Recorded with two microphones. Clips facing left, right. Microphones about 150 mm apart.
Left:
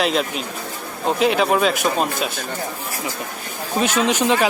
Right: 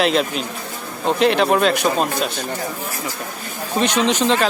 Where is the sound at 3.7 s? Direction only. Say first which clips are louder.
Right 1 dB; 5° left (ahead or behind).